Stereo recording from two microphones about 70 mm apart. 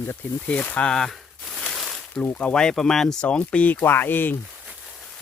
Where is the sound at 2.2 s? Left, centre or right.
Left.